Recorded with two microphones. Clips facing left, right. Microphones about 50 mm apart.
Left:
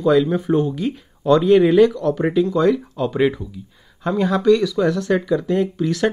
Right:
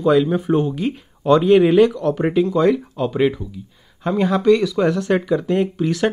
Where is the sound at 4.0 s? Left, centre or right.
Centre.